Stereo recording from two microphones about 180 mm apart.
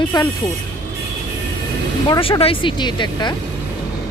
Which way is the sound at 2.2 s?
30° left (ahead or behind).